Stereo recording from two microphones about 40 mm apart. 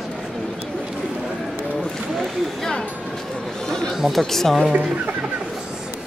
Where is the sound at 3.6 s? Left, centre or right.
Centre.